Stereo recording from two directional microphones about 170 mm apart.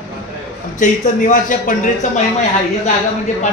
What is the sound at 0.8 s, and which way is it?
Speech, 50° left (ahead or behind).